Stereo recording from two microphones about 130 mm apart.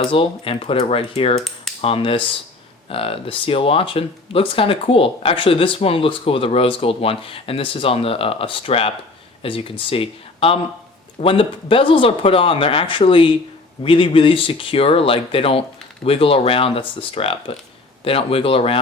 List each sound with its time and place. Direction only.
0.0 s speech: 45° left (ahead or behind)